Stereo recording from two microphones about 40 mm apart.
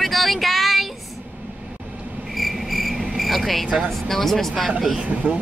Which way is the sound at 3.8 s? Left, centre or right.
Centre.